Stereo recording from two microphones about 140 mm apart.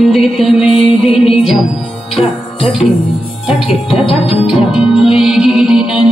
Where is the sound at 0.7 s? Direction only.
45° left (ahead or behind).